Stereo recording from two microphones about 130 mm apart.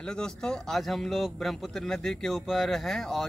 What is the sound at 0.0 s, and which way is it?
A man's voice, 5° left (ahead or behind).